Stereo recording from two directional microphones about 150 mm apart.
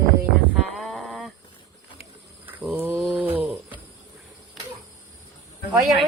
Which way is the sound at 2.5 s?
10° right (ahead or behind).